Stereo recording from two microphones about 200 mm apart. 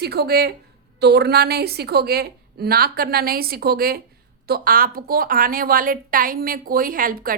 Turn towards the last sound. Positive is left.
turn(degrees=-45)  # may be behind; listen again after turning